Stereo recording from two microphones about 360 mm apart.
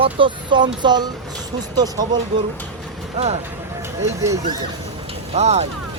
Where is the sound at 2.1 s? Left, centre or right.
Centre.